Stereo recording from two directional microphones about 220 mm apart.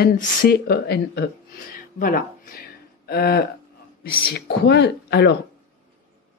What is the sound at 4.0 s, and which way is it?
Speech, 45° left (ahead or behind).